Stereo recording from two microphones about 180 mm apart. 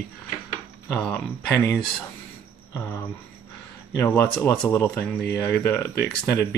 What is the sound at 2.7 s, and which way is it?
Speech, 15° left (ahead or behind).